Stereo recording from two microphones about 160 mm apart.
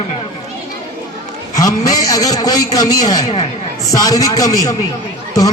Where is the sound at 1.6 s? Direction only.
20° left (ahead or behind).